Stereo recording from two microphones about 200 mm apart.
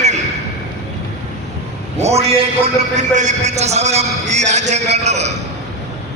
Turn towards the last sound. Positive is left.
turn(degrees=-35)  # may be behind; listen again after turning